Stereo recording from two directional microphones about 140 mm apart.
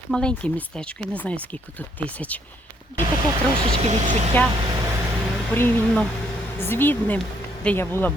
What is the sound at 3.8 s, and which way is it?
Speech, 55° right (ahead or behind).